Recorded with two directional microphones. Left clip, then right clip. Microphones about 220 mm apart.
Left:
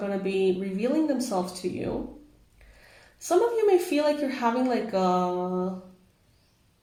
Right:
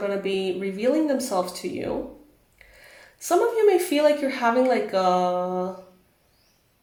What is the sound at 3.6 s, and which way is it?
Speech, 25° right (ahead or behind).